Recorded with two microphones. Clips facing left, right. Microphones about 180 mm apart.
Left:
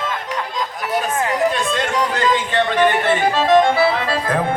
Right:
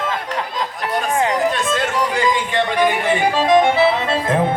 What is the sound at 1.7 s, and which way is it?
Music, 5° right (ahead or behind).